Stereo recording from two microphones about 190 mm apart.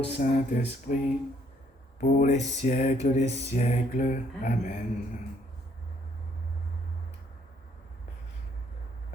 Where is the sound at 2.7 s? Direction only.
40° left (ahead or behind).